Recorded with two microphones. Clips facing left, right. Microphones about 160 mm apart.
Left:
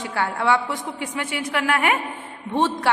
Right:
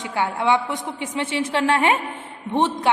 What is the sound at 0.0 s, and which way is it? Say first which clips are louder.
A woman's voice: right 1 dB; 20° right (ahead or behind).